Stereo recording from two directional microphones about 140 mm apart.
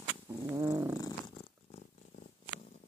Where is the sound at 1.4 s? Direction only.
45° left (ahead or behind).